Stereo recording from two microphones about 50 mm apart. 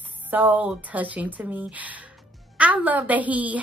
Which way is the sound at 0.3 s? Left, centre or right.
Right.